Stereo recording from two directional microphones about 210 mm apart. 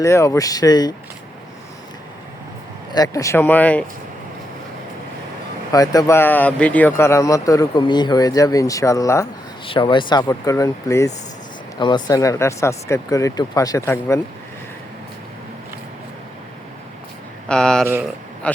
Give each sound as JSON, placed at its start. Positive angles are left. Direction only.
{"t": 0.0, "sound": "speech", "side_deg": 15}
{"t": 2.9, "sound": "speech", "side_deg": 15}
{"t": 5.7, "sound": "speech", "side_deg": 15}
{"t": 17.5, "sound": "speech", "side_deg": 5}